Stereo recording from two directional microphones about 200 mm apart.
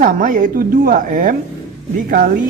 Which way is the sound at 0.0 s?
40° right (ahead or behind).